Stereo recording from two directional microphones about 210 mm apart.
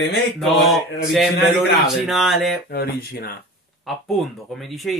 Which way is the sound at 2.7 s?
45° left (ahead or behind).